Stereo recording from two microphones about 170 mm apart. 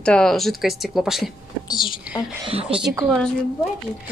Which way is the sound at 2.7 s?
5° right (ahead or behind).